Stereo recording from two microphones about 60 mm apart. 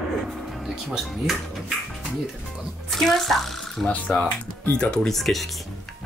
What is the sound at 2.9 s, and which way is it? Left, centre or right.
Speech, centre.